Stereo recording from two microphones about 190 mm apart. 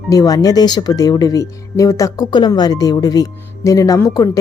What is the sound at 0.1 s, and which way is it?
Speech, 20° left (ahead or behind).